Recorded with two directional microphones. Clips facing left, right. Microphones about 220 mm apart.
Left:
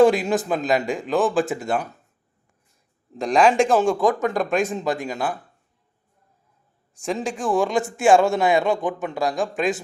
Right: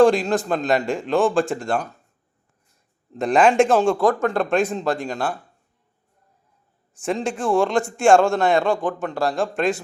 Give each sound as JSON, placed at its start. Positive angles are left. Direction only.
{"t": 0.0, "sound": "a man's voice", "side_deg": 5}
{"t": 3.1, "sound": "a man's voice", "side_deg": -5}
{"t": 3.9, "sound": "speech", "side_deg": 15}
{"t": 5.1, "sound": "a man's voice", "side_deg": 5}
{"t": 7.0, "sound": "a man's voice", "side_deg": 0}
{"t": 8.6, "sound": "a man's voice", "side_deg": 20}
{"t": 9.4, "sound": "a man's voice", "side_deg": 0}